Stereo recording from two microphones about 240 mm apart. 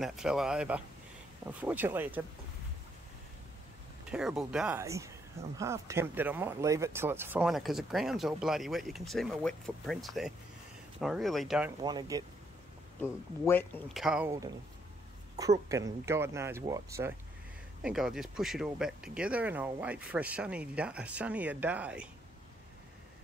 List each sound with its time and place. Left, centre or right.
0.0 s speech: centre
4.1 s speech: centre
11.8 s speech: centre
13.0 s speech: centre
15.7 s speech: centre
17.8 s speech: centre